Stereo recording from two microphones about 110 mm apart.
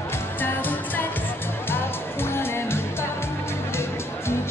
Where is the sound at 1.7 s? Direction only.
20° left (ahead or behind).